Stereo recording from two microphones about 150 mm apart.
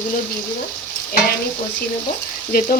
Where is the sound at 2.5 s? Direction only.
65° left (ahead or behind).